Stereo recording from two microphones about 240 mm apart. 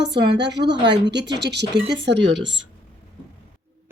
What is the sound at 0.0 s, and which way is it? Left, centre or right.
A woman's voice, right.